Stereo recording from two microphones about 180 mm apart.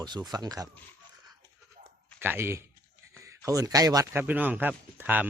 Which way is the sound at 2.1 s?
10° right (ahead or behind).